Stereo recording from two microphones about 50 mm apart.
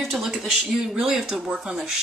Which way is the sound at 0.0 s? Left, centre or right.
Centre.